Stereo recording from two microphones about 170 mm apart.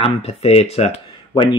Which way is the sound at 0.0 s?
35° left (ahead or behind).